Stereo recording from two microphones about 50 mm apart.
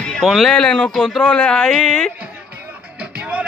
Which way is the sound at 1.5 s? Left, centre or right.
Centre.